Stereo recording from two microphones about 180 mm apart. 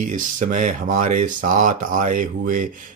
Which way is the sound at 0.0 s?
45° right (ahead or behind).